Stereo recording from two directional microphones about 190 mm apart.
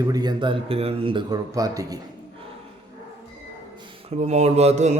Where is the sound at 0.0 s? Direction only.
20° right (ahead or behind).